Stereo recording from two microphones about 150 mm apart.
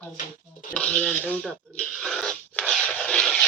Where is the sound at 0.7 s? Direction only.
5° left (ahead or behind).